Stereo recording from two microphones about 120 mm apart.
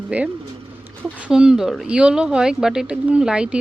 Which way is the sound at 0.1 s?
10° right (ahead or behind).